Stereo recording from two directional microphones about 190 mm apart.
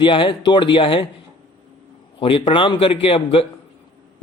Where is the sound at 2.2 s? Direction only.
30° left (ahead or behind).